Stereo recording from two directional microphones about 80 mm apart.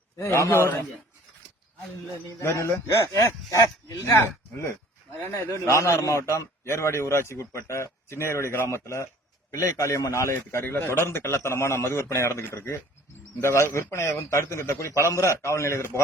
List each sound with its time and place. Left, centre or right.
0.3 s a man's voice: left
2.4 s a man's voice: left
5.3 s a man's voice: left